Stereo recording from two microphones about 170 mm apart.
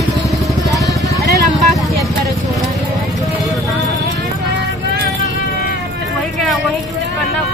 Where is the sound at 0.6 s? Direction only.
20° left (ahead or behind).